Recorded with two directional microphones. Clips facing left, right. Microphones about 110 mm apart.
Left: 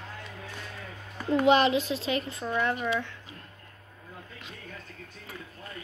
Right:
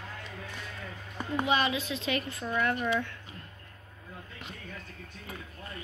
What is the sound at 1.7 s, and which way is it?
Speech, 35° left (ahead or behind).